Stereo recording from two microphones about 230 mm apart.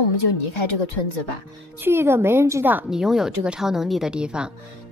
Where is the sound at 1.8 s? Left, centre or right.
Centre.